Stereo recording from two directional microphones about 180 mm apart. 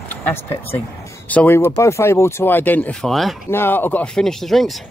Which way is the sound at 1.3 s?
10° left (ahead or behind).